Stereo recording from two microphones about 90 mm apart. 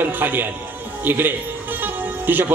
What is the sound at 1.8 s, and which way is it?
Music, 20° right (ahead or behind).